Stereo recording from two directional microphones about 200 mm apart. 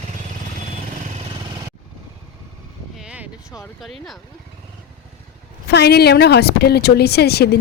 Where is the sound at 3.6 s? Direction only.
Centre (ahead or behind).